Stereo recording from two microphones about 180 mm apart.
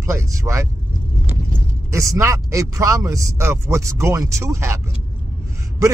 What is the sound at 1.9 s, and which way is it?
Speech, 15° right (ahead or behind).